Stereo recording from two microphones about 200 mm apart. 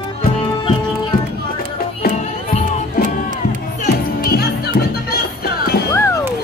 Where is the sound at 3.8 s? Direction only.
50° left (ahead or behind).